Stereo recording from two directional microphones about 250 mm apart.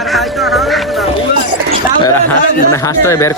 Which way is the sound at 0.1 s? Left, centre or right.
Centre.